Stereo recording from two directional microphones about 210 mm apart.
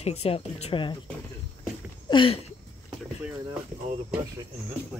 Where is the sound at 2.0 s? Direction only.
25° left (ahead or behind).